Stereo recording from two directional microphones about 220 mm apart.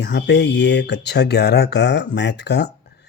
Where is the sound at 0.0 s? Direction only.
50° left (ahead or behind).